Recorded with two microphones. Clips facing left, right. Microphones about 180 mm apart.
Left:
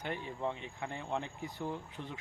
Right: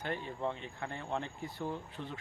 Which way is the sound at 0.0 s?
15° left (ahead or behind).